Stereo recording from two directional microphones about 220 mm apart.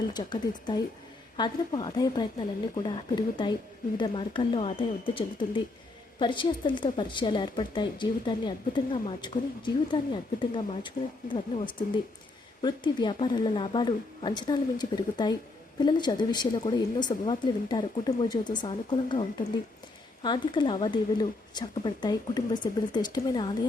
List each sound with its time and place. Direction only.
0.1 s a woman's voice: 20° left (ahead or behind)
20.2 s a woman's voice: 20° left (ahead or behind)